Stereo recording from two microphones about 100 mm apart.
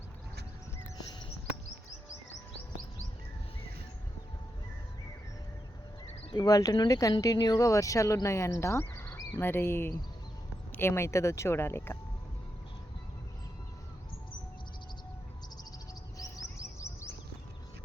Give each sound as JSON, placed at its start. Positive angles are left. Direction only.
{"t": 6.3, "sound": "speech", "side_deg": 40}
{"t": 8.8, "sound": "a sound", "side_deg": 20}
{"t": 9.4, "sound": "speech", "side_deg": 25}
{"t": 16.1, "sound": "bird", "side_deg": 35}